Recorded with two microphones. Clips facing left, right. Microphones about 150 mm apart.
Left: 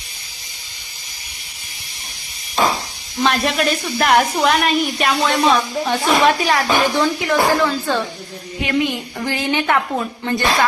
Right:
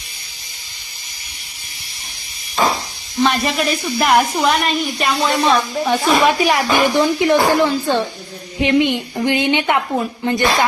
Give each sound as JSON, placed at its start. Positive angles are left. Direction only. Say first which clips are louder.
{"t": 3.2, "sound": "a woman's voice", "louder": "right 1 dB", "side_deg": 0}